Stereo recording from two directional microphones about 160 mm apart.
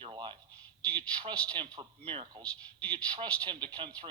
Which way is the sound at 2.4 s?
10° left (ahead or behind).